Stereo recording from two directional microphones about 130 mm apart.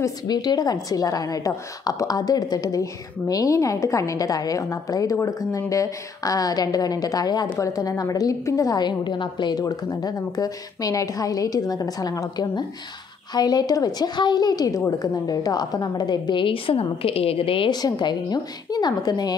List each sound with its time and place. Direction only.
0.0 s a woman's voice: 30° left (ahead or behind)